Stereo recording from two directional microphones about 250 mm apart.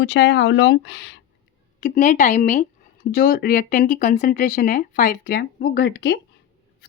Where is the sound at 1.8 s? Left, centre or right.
Left.